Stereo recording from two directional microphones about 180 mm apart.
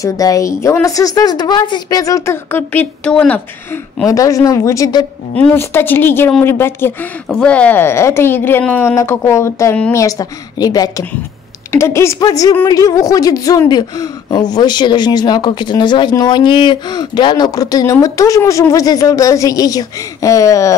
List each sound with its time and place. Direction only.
0.0 s a woman's voice: 20° left (ahead or behind)
4.1 s a woman's voice: 20° left (ahead or behind)